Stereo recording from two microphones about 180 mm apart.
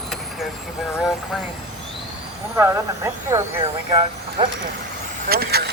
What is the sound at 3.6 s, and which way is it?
Speech, 25° right (ahead or behind).